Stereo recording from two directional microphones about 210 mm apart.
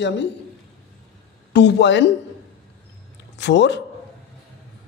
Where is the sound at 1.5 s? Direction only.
55° left (ahead or behind).